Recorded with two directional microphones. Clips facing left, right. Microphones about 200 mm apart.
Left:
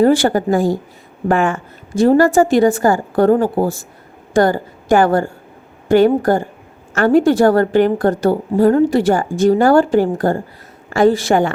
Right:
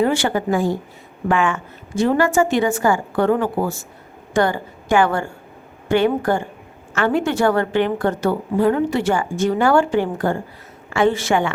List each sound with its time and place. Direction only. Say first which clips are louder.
0.0 s a woman's voice: left 6 dB; 40° left (ahead or behind)